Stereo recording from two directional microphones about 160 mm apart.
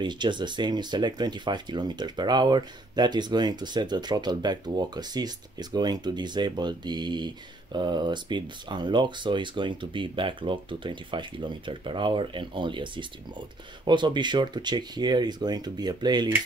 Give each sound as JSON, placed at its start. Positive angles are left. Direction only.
{"t": 0.0, "sound": "speech", "side_deg": -30}